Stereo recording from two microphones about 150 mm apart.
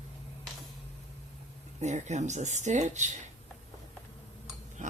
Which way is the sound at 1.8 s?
50° right (ahead or behind).